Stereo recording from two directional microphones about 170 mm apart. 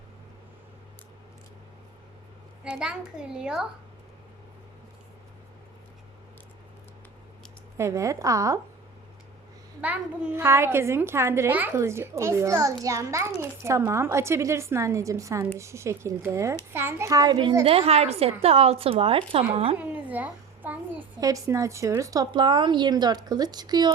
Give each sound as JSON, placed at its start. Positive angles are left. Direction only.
{"t": 2.6, "sound": "a child's voice", "side_deg": -5}
{"t": 7.8, "sound": "a woman's voice", "side_deg": -15}
{"t": 9.8, "sound": "a woman's voice", "side_deg": -10}
{"t": 17.6, "sound": "a woman's voice", "side_deg": -35}
{"t": 19.8, "sound": "a sound", "side_deg": -10}
{"t": 21.2, "sound": "a woman's voice", "side_deg": -20}